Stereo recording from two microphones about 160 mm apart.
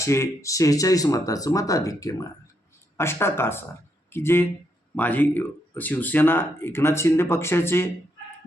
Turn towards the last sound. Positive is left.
turn(degrees=15)  # may be behind; listen again after turning